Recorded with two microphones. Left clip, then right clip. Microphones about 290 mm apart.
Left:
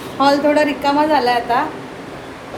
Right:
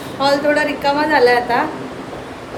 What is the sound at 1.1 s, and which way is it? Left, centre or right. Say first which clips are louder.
Speech: right 2 dB; centre.